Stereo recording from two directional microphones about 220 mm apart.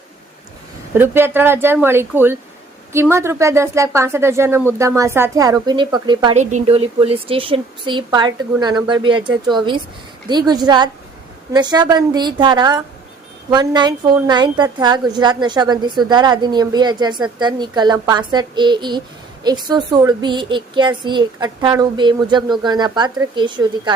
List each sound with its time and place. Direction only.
0.9 s speech: 10° right (ahead or behind)
6.3 s speech: 30° right (ahead or behind)